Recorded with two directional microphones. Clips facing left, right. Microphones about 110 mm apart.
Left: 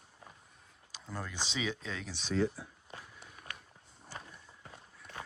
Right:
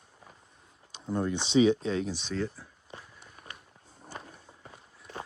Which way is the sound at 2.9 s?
25° right (ahead or behind).